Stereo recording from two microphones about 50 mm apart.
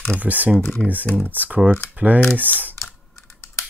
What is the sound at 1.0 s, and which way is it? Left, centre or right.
Speech, left.